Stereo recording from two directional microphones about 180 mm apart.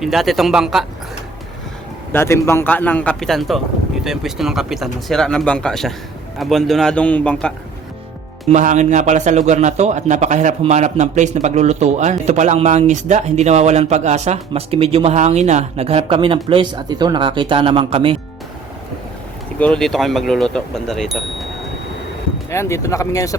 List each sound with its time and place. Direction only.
0.0 s speech: centre (ahead or behind)
2.1 s a man's voice: 15° left (ahead or behind)
8.5 s speech: 40° right (ahead or behind)
19.5 s speech: 5° left (ahead or behind)
22.4 s a man's voice: 15° left (ahead or behind)